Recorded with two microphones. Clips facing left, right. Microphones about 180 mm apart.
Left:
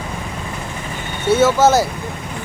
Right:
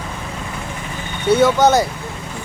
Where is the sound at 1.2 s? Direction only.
5° left (ahead or behind).